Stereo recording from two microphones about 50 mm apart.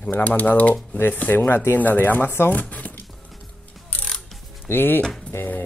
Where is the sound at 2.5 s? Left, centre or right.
Left.